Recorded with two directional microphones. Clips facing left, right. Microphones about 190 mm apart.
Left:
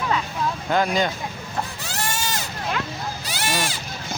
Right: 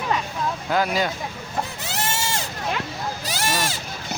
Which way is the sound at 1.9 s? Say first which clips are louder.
Right 1 dB; 25° right (ahead or behind).